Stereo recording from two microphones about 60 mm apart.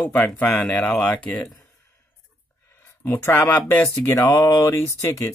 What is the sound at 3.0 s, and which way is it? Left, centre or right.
Speech, left.